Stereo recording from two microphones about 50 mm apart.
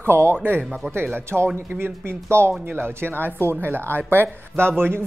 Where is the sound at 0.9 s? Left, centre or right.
Right.